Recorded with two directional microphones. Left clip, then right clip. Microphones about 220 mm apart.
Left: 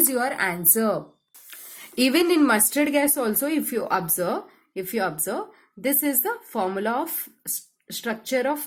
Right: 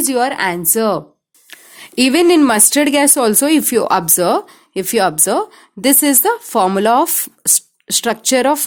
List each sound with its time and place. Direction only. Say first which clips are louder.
0.1 s a woman's voice: right 9 dB; 35° right (ahead or behind)